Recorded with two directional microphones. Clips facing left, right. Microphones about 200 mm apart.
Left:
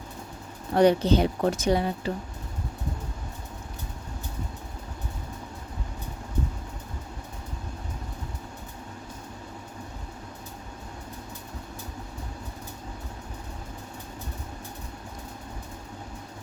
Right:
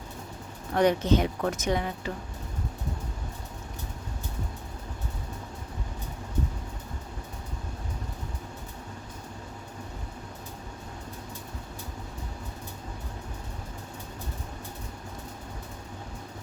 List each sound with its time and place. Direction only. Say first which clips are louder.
0.7 s a woman's voice: left 3 dB; 30° left (ahead or behind)